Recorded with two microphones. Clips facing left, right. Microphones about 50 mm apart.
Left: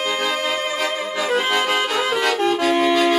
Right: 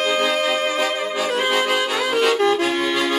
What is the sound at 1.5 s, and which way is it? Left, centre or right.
Music, centre.